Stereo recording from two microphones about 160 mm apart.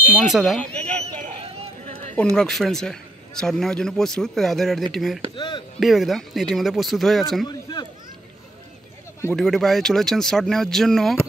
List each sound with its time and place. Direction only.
0.2 s a man's voice: centre (ahead or behind)
1.0 s a sound: 40° right (ahead or behind)
2.3 s a man's voice: centre (ahead or behind)
5.3 s a sound: 30° left (ahead or behind)
5.8 s a man's voice: centre (ahead or behind)
9.3 s a man's voice: centre (ahead or behind)